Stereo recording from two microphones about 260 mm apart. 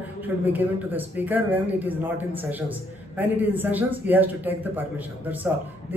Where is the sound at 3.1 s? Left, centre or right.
Centre.